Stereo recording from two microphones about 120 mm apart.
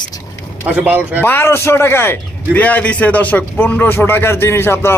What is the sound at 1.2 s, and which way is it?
A man's voice, 20° left (ahead or behind).